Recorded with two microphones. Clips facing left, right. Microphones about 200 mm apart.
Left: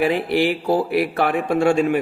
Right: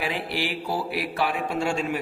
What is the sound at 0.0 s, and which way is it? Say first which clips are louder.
A man's voice: left 10 dB; 50° left (ahead or behind).